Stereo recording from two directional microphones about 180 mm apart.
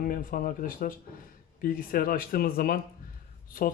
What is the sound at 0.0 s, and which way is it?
Speech, 50° left (ahead or behind).